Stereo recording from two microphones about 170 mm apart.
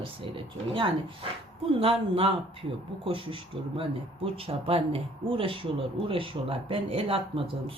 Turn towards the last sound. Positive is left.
turn(degrees=-30)  # may be behind; listen again after turning